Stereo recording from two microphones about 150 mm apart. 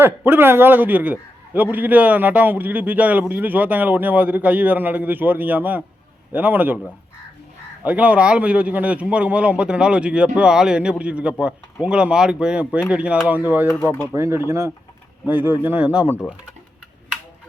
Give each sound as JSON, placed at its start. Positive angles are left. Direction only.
{"t": 0.0, "sound": "a man's voice", "side_deg": -15}
{"t": 7.9, "sound": "a man's voice", "side_deg": -10}
{"t": 13.7, "sound": "speech", "side_deg": 15}
{"t": 14.1, "sound": "a man's voice", "side_deg": -15}